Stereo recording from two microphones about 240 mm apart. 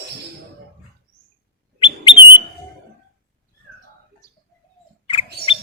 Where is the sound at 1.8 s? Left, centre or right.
Left.